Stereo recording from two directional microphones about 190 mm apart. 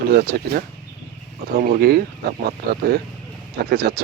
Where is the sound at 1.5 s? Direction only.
50° right (ahead or behind).